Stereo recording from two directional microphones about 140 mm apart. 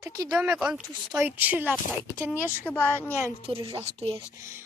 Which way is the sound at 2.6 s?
15° left (ahead or behind).